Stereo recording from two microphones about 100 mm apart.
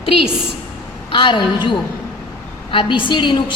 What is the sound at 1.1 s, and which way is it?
A woman's voice, 55° left (ahead or behind).